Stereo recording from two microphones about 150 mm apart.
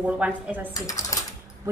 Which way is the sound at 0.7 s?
25° left (ahead or behind).